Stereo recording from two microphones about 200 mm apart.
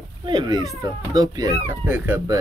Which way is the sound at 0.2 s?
20° right (ahead or behind).